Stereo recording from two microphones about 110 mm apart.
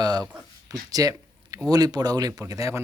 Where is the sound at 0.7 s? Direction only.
35° right (ahead or behind).